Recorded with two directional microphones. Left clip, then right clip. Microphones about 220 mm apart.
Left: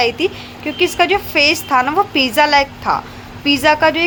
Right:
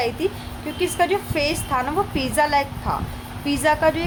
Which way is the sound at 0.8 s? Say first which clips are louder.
Left 7 dB; 15° left (ahead or behind).